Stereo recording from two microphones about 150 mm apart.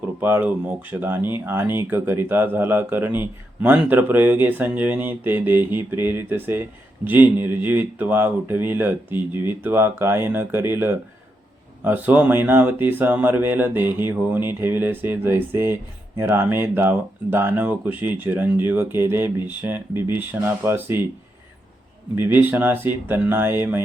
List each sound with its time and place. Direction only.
0.2 s speech: 15° right (ahead or behind)
22.1 s speech: 15° right (ahead or behind)